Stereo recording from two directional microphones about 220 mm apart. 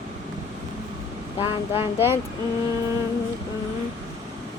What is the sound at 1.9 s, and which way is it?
Speech, 10° right (ahead or behind).